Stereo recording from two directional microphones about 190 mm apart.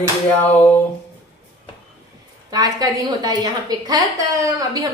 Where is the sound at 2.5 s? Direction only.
20° right (ahead or behind).